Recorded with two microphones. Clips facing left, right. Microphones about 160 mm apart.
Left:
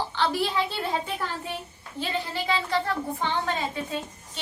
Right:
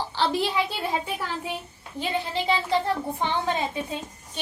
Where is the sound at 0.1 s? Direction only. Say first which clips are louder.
Right 1 dB; 25° right (ahead or behind).